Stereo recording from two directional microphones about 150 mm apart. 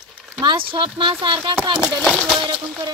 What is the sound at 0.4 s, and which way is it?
Speech, 35° right (ahead or behind).